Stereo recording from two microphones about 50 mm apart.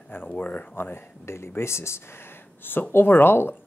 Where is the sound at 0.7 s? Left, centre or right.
Left.